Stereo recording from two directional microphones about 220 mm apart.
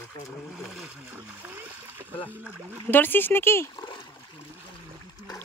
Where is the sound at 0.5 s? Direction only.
5° right (ahead or behind).